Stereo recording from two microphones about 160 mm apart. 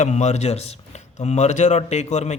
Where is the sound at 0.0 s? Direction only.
45° left (ahead or behind).